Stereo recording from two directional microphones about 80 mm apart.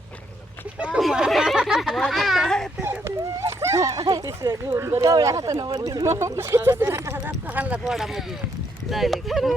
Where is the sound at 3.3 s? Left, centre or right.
Right.